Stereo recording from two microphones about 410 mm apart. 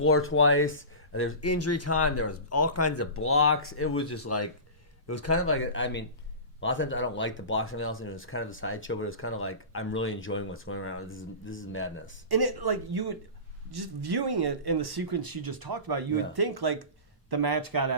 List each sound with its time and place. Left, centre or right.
0.0 s speech: left
12.3 s speech: right